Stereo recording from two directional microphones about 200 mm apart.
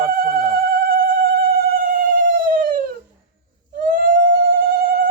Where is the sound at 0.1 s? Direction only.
45° right (ahead or behind).